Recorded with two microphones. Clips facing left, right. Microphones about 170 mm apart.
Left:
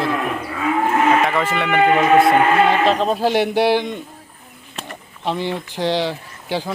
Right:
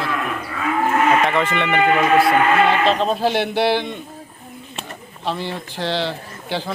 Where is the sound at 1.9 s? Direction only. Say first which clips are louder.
Left 3 dB; 25° left (ahead or behind).